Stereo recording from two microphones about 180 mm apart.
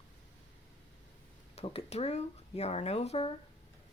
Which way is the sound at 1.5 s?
35° left (ahead or behind).